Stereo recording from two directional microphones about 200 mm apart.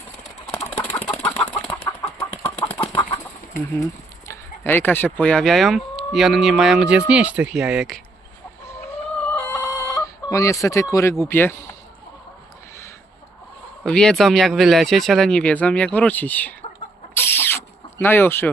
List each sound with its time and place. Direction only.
0.7 s chicken: 5° left (ahead or behind)
2.6 s chicken: 25° left (ahead or behind)
4.3 s speech: 10° left (ahead or behind)
9.2 s chicken: 15° left (ahead or behind)
11.2 s speech: 10° left (ahead or behind)
13.8 s speech: 5° left (ahead or behind)
17.2 s squeal: 10° left (ahead or behind)